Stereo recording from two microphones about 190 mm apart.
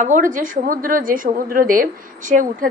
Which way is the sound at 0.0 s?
45° right (ahead or behind).